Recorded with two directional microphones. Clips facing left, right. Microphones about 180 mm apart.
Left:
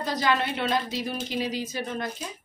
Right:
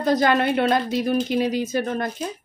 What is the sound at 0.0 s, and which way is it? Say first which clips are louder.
Speech: right 7 dB; 50° right (ahead or behind).